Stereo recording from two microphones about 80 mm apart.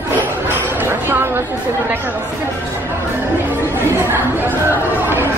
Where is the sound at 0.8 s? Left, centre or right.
Right.